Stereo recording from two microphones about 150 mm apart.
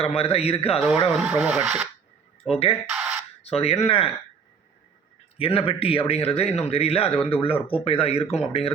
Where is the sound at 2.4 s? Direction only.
40° left (ahead or behind).